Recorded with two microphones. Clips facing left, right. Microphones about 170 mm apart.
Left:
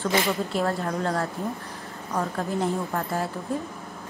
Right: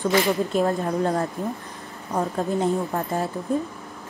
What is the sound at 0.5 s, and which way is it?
A woman's voice, 20° right (ahead or behind).